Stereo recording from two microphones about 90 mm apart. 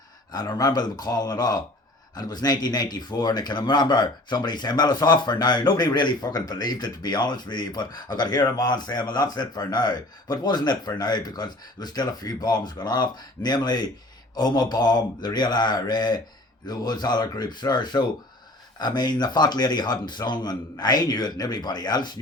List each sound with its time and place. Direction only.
0.3 s speech: 50° left (ahead or behind)